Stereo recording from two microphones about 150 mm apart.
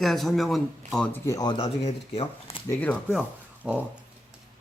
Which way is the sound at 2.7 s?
10° left (ahead or behind).